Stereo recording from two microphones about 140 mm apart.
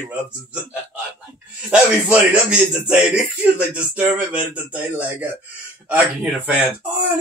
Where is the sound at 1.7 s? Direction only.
10° right (ahead or behind).